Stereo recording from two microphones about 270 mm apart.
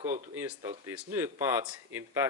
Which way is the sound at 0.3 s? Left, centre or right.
Centre.